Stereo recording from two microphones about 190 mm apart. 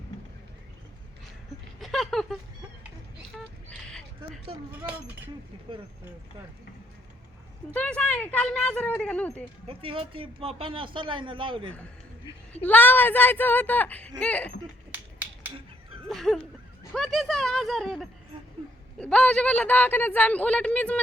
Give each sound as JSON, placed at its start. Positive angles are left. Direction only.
{"t": 1.8, "sound": "a sound", "side_deg": 0}
{"t": 4.2, "sound": "speech", "side_deg": -25}
{"t": 4.9, "sound": "speech", "side_deg": -10}
{"t": 5.7, "sound": "speech", "side_deg": -25}
{"t": 7.7, "sound": "a man's voice", "side_deg": 5}
{"t": 9.6, "sound": "speech", "side_deg": -30}
{"t": 12.6, "sound": "a man's voice", "side_deg": 10}
{"t": 14.9, "sound": "finger snapping", "side_deg": -10}
{"t": 16.0, "sound": "a sound", "side_deg": 0}
{"t": 16.9, "sound": "a man's voice", "side_deg": 0}